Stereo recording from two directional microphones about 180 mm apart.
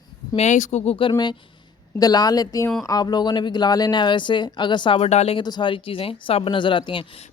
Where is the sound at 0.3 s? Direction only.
40° left (ahead or behind).